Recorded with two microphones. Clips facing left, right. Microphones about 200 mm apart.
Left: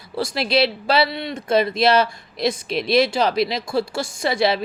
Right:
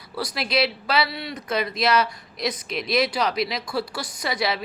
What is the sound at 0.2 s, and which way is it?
Speech, 25° left (ahead or behind).